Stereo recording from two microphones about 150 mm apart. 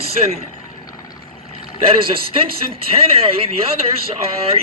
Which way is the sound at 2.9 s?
40° right (ahead or behind).